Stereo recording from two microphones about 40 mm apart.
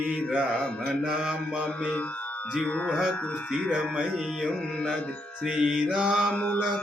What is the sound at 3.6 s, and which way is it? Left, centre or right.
Music, right.